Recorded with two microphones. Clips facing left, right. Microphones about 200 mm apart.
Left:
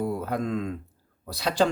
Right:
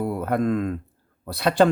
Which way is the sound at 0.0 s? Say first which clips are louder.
Right 4 dB; 60° right (ahead or behind).